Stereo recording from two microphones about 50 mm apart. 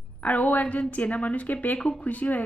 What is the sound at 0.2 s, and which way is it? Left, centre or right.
A woman's voice, left.